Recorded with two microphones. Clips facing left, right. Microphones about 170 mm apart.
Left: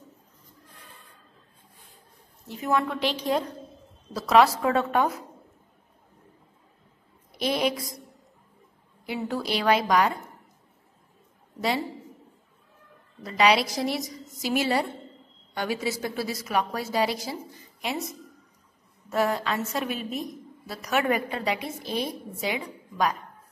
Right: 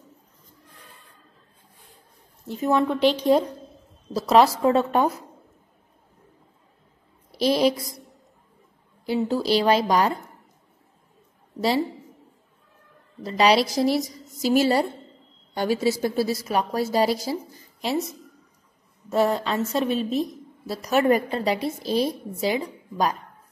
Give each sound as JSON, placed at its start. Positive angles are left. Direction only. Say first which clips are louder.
{"t": 2.6, "sound": "a woman's voice", "louder": "right 4 dB", "side_deg": -25}
{"t": 3.0, "sound": "a woman's voice", "louder": "right 7 dB", "side_deg": 0}
{"t": 4.1, "sound": "a woman's voice", "louder": "right 2 dB", "side_deg": -30}
{"t": 7.3, "sound": "a woman's voice", "louder": "right 6 dB", "side_deg": -35}
{"t": 9.0, "sound": "a woman's voice", "louder": "right 6 dB", "side_deg": -30}
{"t": 13.2, "sound": "a woman's voice", "louder": "right 3 dB", "side_deg": -30}
{"t": 19.3, "sound": "a woman's voice", "louder": "right 4 dB", "side_deg": -30}